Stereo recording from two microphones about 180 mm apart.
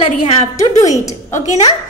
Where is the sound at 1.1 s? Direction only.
15° left (ahead or behind).